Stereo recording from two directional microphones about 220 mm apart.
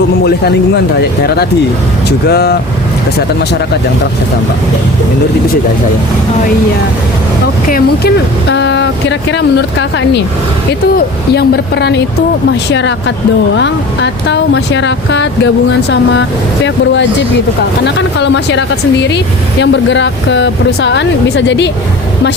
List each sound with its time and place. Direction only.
2.0 s speech: 45° left (ahead or behind)
7.7 s speech: 50° left (ahead or behind)
16.6 s a woman's voice: 55° left (ahead or behind)